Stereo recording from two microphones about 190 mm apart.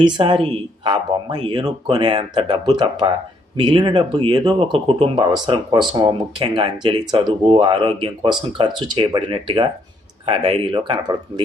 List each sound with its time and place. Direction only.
0.0 s speech: 25° right (ahead or behind)